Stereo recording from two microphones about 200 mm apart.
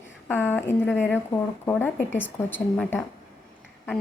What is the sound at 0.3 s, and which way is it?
A woman's voice, 10° left (ahead or behind).